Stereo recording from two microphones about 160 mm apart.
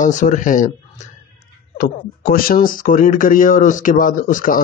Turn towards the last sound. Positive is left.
turn(degrees=60)  # may be behind; listen again after turning